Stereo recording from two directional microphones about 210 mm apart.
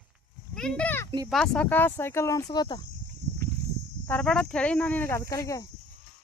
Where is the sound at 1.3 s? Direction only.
5° left (ahead or behind); by 2.8 s 20° left (ahead or behind).